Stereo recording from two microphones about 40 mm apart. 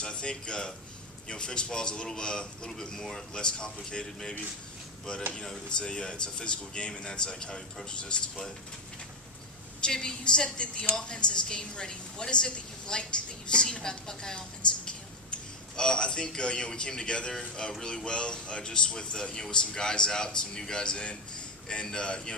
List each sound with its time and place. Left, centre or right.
0.0 s a man's voice: left
9.8 s a man's voice: centre
14.9 s a sound: left
16.3 s a man's voice: left